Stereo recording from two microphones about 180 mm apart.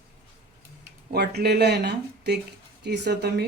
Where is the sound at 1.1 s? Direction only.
65° right (ahead or behind).